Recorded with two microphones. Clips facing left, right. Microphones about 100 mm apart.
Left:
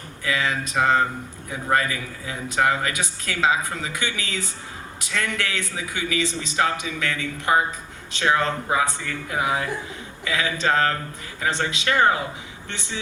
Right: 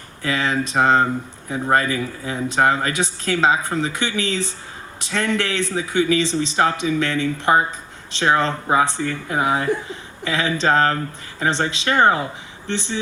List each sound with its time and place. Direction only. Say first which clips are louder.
0.2 s speech: right 4 dB; 30° right (ahead or behind)